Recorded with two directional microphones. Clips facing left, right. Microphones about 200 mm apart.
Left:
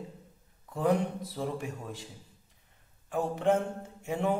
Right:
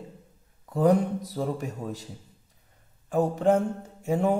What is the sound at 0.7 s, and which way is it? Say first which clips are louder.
Speech: right 6 dB; 40° right (ahead or behind).